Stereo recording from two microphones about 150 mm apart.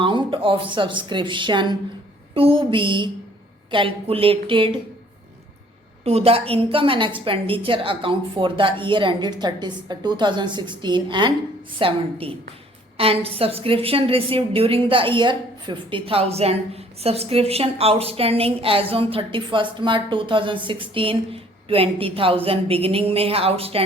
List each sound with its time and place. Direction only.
0.0 s a woman's voice: 35° right (ahead or behind)
6.1 s a woman's voice: 40° right (ahead or behind)